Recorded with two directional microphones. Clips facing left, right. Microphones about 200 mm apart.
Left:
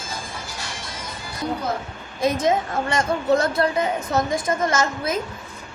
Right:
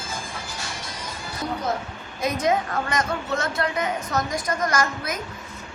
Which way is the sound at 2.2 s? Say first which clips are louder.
Left 3 dB; 25° left (ahead or behind).